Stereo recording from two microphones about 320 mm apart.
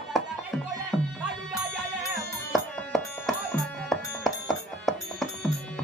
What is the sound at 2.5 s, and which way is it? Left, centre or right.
Music, centre.